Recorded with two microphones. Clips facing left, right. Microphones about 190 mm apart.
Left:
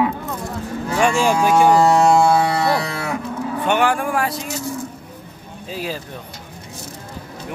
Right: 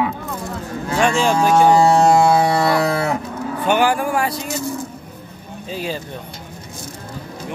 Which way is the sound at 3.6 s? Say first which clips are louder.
Right 2 dB; centre (ahead or behind).